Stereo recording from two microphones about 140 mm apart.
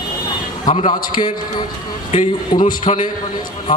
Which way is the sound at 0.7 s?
75° left (ahead or behind).